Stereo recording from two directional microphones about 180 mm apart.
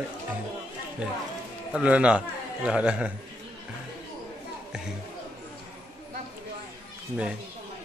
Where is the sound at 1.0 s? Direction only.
5° right (ahead or behind).